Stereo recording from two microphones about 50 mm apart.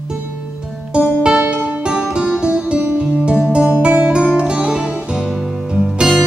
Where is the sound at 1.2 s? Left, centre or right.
Centre.